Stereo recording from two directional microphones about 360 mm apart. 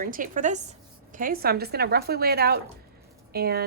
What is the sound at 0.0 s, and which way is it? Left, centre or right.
Speech, right.